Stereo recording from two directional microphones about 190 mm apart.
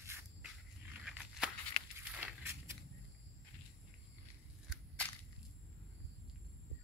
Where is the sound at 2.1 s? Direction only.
10° right (ahead or behind).